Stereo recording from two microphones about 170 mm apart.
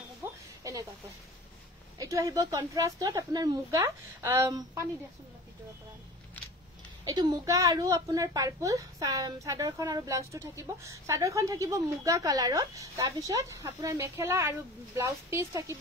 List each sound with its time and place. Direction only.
0.2 s a sound: 20° right (ahead or behind)
2.0 s a woman's voice: 20° right (ahead or behind)
7.2 s a woman's voice: 20° right (ahead or behind)